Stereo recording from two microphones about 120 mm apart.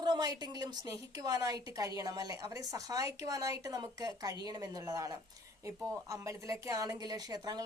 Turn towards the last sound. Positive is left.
turn(degrees=-35)  # may be behind; listen again after turning